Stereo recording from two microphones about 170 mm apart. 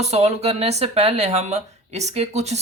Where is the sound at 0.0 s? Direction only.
40° right (ahead or behind).